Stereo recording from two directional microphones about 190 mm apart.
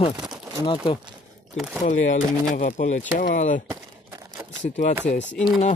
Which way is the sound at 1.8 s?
40° left (ahead or behind).